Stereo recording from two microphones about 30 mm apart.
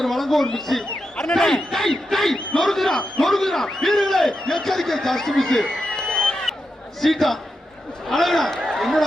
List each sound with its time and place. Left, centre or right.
0.0 s a sound: centre
0.7 s a man's voice: centre
1.2 s a man's voice: centre
7.0 s a man's voice: centre